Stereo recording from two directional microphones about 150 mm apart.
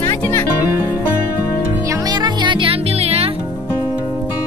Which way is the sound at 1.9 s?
30° right (ahead or behind).